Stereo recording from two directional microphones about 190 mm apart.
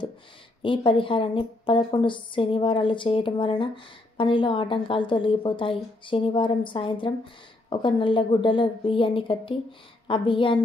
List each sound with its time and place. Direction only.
0.6 s speech: 25° left (ahead or behind)